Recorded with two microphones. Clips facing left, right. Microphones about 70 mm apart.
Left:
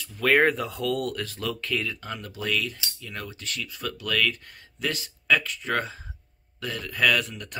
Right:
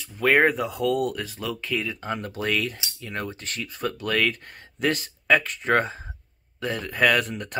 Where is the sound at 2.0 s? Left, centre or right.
Right.